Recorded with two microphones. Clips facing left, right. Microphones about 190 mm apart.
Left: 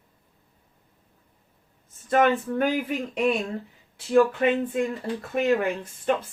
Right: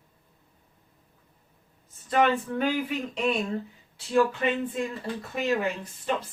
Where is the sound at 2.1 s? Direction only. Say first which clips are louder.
Left 3 dB; 50° left (ahead or behind).